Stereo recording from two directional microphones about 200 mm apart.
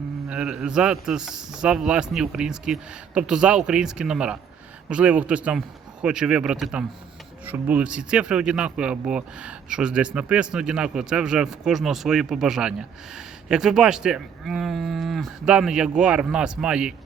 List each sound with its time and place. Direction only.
0.3 s a man's voice: 5° right (ahead or behind)